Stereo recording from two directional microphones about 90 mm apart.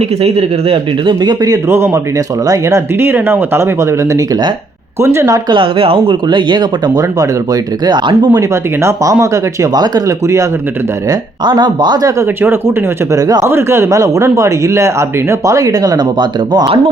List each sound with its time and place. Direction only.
0.2 s speech: 90° right
1.2 s speech: 50° right (ahead or behind)
1.6 s a man's voice: 30° right (ahead or behind)
3.1 s a man's voice: 25° right (ahead or behind)
5.5 s speech: 70° right (ahead or behind)
6.2 s speech: 55° right (ahead or behind)
8.4 s a man's voice: 35° right (ahead or behind)
9.8 s speech: 50° right (ahead or behind)
12.2 s a man's voice: 25° right (ahead or behind)
13.5 s a man's voice: 30° right (ahead or behind); by 16.7 s 55° right (ahead or behind)